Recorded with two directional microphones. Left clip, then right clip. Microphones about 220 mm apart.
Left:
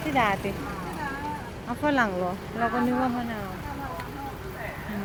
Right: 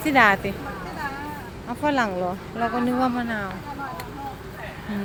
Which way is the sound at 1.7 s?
Centre (ahead or behind).